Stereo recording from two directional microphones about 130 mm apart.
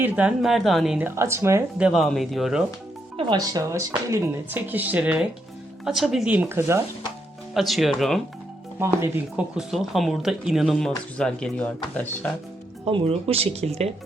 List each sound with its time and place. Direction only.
0.0 s speech: 10° right (ahead or behind)
0.4 s speech: centre (ahead or behind)
0.9 s speech: 20° right (ahead or behind)
1.8 s speech: centre (ahead or behind)
3.2 s speech: 35° right (ahead or behind)
7.5 s speech: centre (ahead or behind)
8.8 s speech: 20° right (ahead or behind)
9.3 s speech: centre (ahead or behind)
12.8 s speech: 50° right (ahead or behind)